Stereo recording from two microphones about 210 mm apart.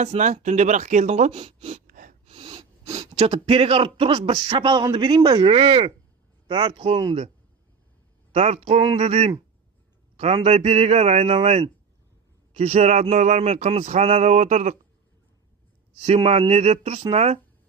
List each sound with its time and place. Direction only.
0.0 s speech: 35° right (ahead or behind)
2.3 s a sound: 20° right (ahead or behind)
3.2 s speech: 30° right (ahead or behind)
8.3 s speech: 30° right (ahead or behind)
12.5 s a sound: 30° right (ahead or behind)
16.0 s speech: 25° right (ahead or behind)